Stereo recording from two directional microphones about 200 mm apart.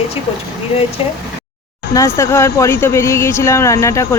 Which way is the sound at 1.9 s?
15° left (ahead or behind).